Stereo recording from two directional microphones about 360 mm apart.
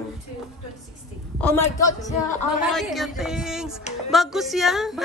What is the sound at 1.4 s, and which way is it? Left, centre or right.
A man's voice, centre.